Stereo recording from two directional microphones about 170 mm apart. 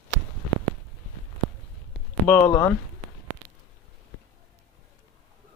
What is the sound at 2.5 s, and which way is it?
Speech, 15° left (ahead or behind).